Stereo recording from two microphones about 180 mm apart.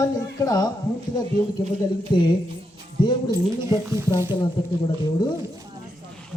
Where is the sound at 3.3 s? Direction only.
15° right (ahead or behind).